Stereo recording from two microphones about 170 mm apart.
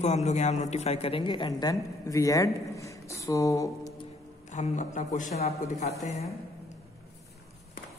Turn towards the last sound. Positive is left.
turn(degrees=40)  # may be behind; listen again after turning